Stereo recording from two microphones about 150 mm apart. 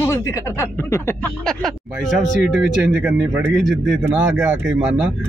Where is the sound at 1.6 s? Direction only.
Centre (ahead or behind).